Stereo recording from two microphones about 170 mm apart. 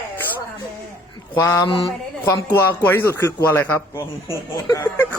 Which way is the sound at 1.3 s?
15° left (ahead or behind).